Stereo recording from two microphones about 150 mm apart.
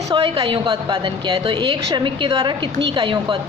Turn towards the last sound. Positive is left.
turn(degrees=-35)  # may be behind; listen again after turning